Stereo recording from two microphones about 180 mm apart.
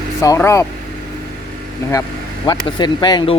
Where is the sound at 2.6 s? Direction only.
25° left (ahead or behind).